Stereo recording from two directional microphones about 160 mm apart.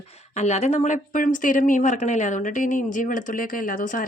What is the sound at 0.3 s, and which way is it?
A woman's voice, 45° left (ahead or behind).